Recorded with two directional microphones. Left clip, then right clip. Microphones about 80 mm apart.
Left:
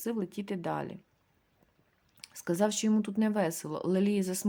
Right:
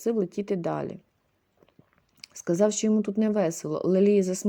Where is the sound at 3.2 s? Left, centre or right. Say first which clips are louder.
Right 5 dB; right.